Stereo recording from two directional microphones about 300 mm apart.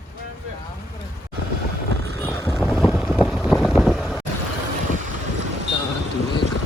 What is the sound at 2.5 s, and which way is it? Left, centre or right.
Boat, centre.